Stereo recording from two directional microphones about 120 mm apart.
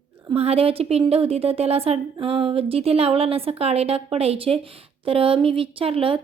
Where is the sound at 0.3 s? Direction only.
55° right (ahead or behind).